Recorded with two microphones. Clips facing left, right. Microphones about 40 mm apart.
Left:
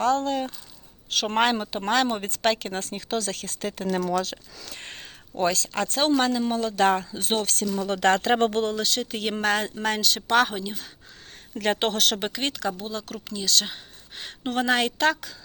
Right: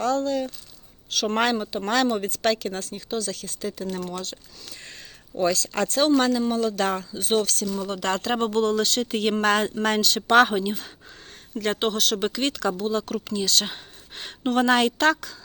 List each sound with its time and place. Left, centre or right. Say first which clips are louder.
0.0 s speech: even; left
1.3 s speech: left 1 dB; left
2.2 s speech: right 1 dB; left
3.2 s speech: even; left
4.7 s a sound: left 3 dB; left
5.4 s speech: right 1 dB; left
6.1 s speech: right 2 dB; centre
6.6 s speech: left 2 dB; left
8.7 s a woman's voice: right 4 dB; centre
10.2 s speech: right 5 dB; centre
11.5 s speech: even; left
12.2 s speech: right 3 dB; centre
12.8 s a woman's voice: right 7 dB; centre